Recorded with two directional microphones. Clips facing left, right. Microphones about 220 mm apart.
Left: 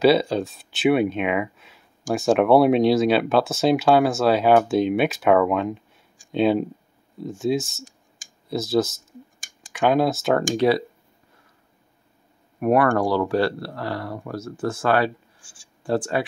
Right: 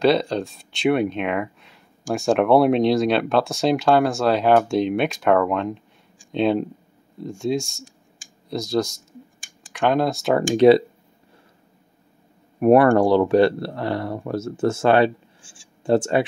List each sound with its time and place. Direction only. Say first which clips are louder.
0.0 s speech: left 1 dB; 5° left (ahead or behind)
10.5 s speech: right 9 dB; 20° right (ahead or behind)
12.5 s speech: right 5 dB; 30° right (ahead or behind)
15.4 s speech: right 5 dB; 40° left (ahead or behind)
15.8 s speech: right 5 dB; 25° right (ahead or behind)